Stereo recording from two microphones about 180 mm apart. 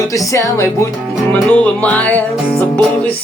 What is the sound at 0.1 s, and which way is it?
Music, 20° left (ahead or behind).